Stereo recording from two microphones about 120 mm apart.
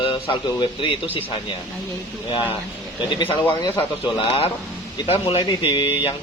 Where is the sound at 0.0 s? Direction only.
45° left (ahead or behind).